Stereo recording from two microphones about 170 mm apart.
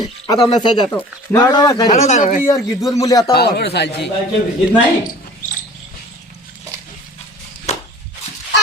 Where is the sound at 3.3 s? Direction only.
75° left (ahead or behind).